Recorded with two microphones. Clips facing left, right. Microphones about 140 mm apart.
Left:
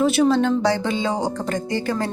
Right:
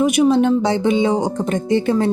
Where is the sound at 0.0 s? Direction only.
15° right (ahead or behind).